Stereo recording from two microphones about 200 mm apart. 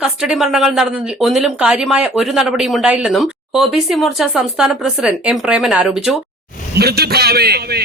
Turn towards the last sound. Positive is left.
turn(degrees=-50)  # may be behind; listen again after turning